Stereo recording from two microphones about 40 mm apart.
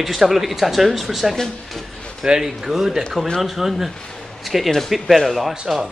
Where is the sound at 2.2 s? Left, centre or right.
Centre.